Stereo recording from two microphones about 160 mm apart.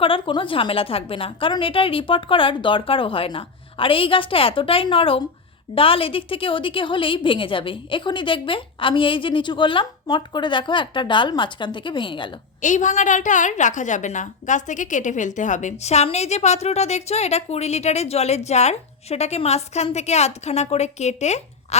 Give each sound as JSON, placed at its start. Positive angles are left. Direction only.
{"t": 0.0, "sound": "a woman's voice", "side_deg": 30}
{"t": 12.6, "sound": "a woman's voice", "side_deg": 50}